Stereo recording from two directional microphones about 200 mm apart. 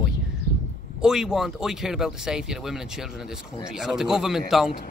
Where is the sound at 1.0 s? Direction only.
5° right (ahead or behind).